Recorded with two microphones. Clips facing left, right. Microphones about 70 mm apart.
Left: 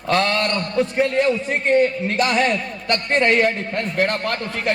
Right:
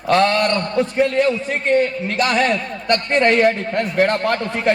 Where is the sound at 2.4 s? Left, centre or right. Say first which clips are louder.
Right 2 dB; right.